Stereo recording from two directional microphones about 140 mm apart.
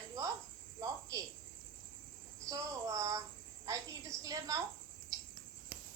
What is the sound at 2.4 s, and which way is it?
A woman's voice, 25° right (ahead or behind).